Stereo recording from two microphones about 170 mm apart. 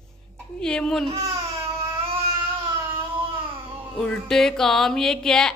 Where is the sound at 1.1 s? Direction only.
35° right (ahead or behind).